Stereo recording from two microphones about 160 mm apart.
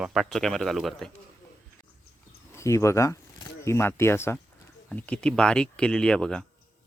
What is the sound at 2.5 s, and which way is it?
Speech, 20° left (ahead or behind).